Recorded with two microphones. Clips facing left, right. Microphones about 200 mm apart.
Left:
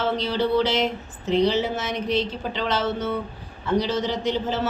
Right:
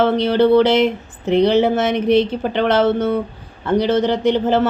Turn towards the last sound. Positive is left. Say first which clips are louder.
# right 9 dB
turn(degrees=-60)  # may be behind; listen again after turning